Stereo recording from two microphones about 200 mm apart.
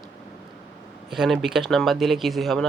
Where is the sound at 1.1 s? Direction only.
Centre (ahead or behind).